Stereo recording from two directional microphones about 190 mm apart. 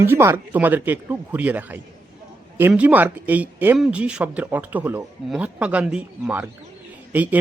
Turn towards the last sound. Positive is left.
turn(degrees=-10)  # may be behind; listen again after turning